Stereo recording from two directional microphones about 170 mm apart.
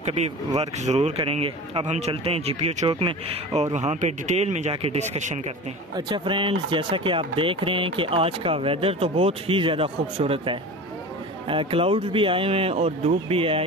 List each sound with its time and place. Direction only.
0.0 s speech: 40° right (ahead or behind)
5.9 s speech: 25° right (ahead or behind)